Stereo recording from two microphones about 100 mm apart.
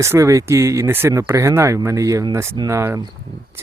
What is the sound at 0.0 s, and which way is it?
Speech, 30° right (ahead or behind).